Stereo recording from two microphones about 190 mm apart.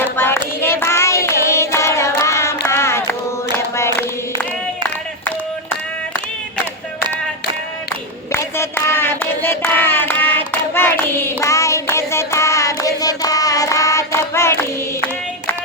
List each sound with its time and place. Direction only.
0.2 s child singing: 10° left (ahead or behind)
8.3 s a sound: 15° left (ahead or behind)
10.8 s hands: 10° left (ahead or behind)